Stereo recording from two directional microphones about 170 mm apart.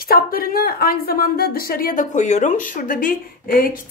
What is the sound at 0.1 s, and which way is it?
A woman's voice, 60° left (ahead or behind).